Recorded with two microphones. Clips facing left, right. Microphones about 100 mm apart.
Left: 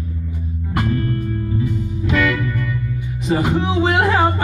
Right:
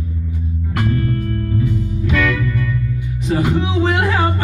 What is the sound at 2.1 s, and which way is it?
Music, 10° left (ahead or behind).